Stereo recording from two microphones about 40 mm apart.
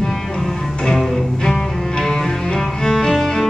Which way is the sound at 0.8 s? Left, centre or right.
Centre.